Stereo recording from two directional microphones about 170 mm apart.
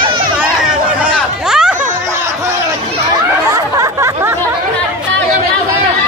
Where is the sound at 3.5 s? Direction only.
15° right (ahead or behind).